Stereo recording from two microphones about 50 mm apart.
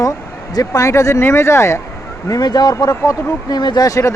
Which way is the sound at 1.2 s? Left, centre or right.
Left.